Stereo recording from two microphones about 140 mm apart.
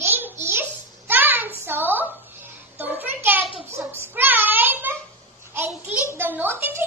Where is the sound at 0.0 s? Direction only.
15° right (ahead or behind).